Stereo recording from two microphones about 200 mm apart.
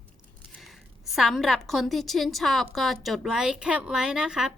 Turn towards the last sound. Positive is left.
turn(degrees=-5)  # may be behind; listen again after turning